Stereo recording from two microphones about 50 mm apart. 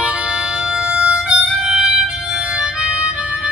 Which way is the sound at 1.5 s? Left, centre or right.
Centre.